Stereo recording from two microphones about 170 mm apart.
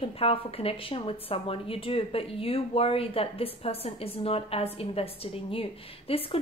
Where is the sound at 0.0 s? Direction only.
35° left (ahead or behind).